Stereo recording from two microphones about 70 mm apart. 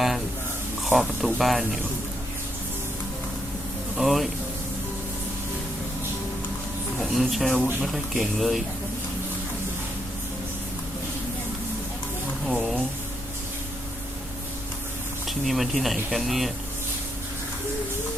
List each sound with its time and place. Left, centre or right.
0.9 s speech: centre
3.9 s speech: centre
7.0 s speech: centre
12.5 s speech: centre
15.3 s speech: centre